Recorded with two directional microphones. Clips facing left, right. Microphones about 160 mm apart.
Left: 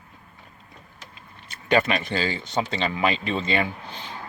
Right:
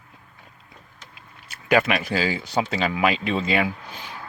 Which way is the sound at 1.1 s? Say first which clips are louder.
Left 1 dB; 5° right (ahead or behind).